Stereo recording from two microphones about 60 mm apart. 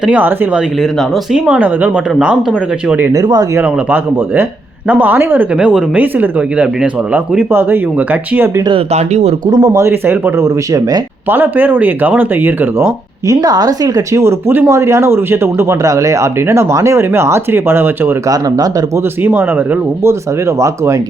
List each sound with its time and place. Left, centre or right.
0.1 s speech: right
2.2 s speech: centre
3.1 s speech: right
3.6 s speech: right
5.5 s speech: centre
6.0 s speech: right
7.9 s speech: right
9.6 s speech: right
9.8 s speech: right
10.7 s speech: right
11.3 s speech: right
13.2 s speech: right
15.8 s speech: right
19.2 s speech: right